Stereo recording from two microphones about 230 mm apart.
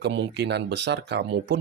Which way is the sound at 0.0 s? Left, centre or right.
Right.